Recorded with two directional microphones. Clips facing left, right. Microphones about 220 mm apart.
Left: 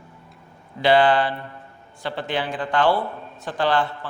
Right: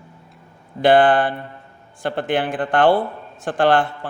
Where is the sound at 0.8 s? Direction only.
50° right (ahead or behind).